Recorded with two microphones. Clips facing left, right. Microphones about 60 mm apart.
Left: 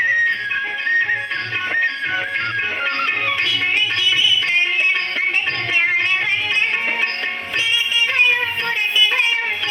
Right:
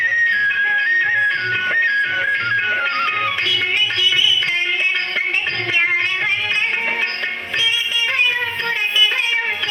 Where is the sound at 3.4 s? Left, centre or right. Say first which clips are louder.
Even; left.